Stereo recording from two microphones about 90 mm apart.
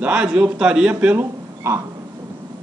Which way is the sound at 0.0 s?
10° right (ahead or behind).